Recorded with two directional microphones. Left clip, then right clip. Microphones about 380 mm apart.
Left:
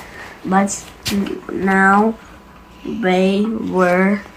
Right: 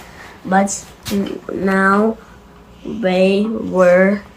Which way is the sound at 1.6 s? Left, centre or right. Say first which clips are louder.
Left 1 dB; centre.